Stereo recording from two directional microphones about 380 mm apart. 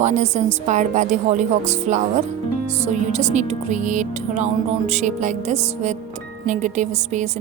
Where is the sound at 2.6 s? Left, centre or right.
Centre.